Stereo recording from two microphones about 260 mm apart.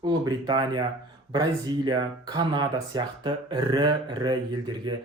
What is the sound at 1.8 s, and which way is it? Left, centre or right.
Speech, centre.